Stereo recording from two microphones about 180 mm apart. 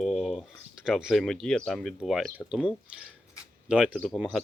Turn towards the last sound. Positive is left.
turn(degrees=0)  # may be behind; listen again after turning